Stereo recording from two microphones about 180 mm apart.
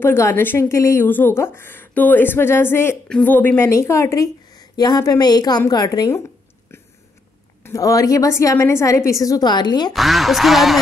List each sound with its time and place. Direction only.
0.0 s speech: 15° left (ahead or behind)
7.6 s a woman's voice: 20° left (ahead or behind)
9.9 s speech: centre (ahead or behind)